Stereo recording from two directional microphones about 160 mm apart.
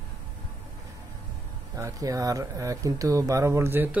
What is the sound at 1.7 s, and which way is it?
Speech, 20° right (ahead or behind).